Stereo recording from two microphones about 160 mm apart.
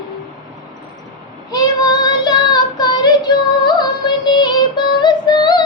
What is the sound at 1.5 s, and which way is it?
Child singing, 25° left (ahead or behind).